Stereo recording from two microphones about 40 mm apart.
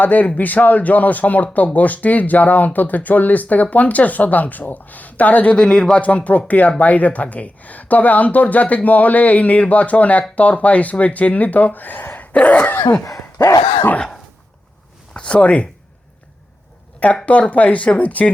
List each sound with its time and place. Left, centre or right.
0.0 s speech: left
5.5 s speech: left
6.0 s speech: left
12.1 s a sound: left
15.1 s speech: left
17.0 s speech: left